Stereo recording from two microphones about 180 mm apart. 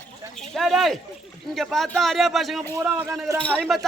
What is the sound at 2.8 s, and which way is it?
Speech, 10° right (ahead or behind).